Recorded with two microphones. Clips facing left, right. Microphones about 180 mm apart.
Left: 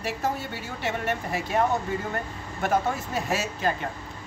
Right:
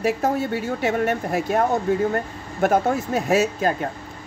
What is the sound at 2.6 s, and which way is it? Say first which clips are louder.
A woman's voice: right 6 dB; 50° right (ahead or behind).